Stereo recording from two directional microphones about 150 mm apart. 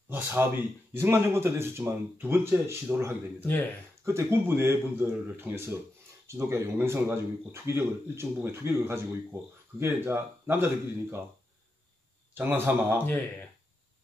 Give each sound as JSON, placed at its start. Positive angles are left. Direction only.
{"t": 0.1, "sound": "speech", "side_deg": -15}
{"t": 3.3, "sound": "speech", "side_deg": 15}
{"t": 4.0, "sound": "speech", "side_deg": -15}
{"t": 12.4, "sound": "speech", "side_deg": -10}